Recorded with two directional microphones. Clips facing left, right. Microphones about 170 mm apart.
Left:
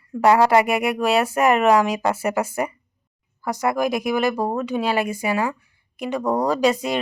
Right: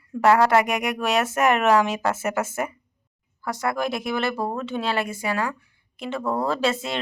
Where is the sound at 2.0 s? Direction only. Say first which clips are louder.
Left 3 dB; 10° left (ahead or behind).